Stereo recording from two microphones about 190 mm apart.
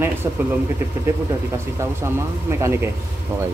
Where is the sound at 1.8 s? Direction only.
15° right (ahead or behind).